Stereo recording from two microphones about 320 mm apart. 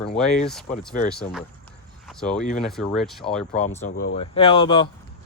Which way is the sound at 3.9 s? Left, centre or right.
Left.